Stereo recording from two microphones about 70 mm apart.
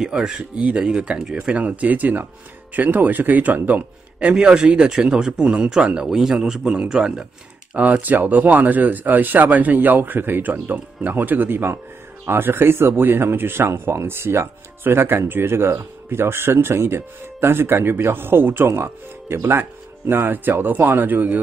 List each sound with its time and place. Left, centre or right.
0.0 s a man's voice: centre
7.7 s speech: right